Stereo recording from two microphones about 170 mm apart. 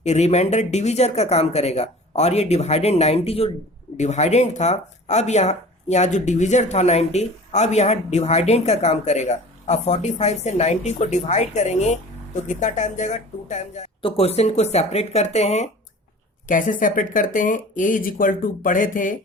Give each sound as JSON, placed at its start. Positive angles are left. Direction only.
{"t": 0.0, "sound": "speech", "side_deg": 40}
{"t": 16.5, "sound": "speech", "side_deg": 50}